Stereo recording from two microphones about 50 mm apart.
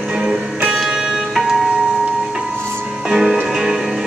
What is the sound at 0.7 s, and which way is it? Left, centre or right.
Music, centre.